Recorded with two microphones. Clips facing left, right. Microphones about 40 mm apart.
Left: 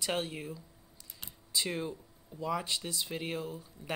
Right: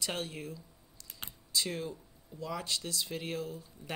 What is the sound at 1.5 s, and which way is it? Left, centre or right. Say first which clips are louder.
Speech: left 1 dB; left.